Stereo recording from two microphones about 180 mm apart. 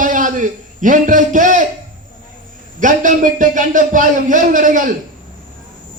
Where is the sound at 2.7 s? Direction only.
45° right (ahead or behind).